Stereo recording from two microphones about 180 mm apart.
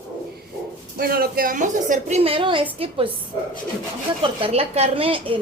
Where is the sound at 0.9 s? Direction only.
60° right (ahead or behind); by 3.1 s 30° right (ahead or behind).